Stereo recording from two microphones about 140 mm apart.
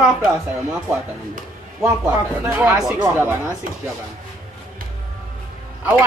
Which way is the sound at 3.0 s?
15° right (ahead or behind).